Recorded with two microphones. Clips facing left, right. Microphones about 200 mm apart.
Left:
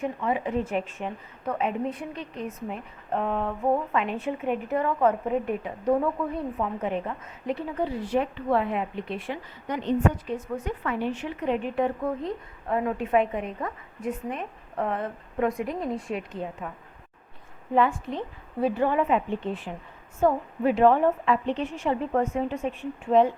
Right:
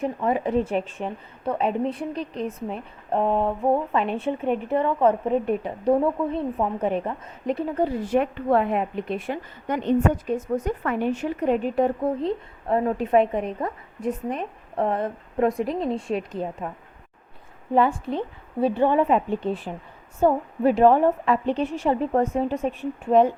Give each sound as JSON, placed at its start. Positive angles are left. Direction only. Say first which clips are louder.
{"t": 0.0, "sound": "a woman's voice", "louder": "right 4 dB", "side_deg": -40}
{"t": 17.7, "sound": "a woman's voice", "louder": "right 3 dB", "side_deg": -35}